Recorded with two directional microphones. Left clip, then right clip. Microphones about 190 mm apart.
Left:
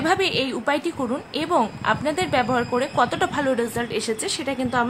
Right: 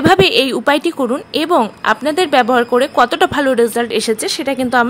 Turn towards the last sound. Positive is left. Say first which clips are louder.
# right 9 dB
turn(degrees=-40)  # may be behind; listen again after turning